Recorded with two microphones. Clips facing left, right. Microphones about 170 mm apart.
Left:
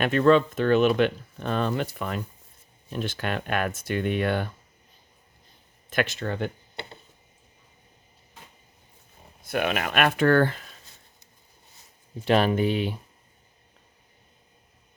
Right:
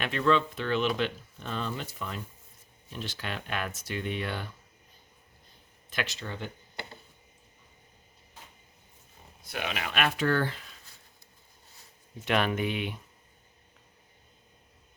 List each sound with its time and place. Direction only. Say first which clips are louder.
0.0 s speech: left 7 dB; 50° left (ahead or behind)
5.9 s speech: left 8 dB; 55° left (ahead or behind)
9.5 s speech: left 8 dB; 55° left (ahead or behind)
12.2 s speech: left 6 dB; 35° left (ahead or behind)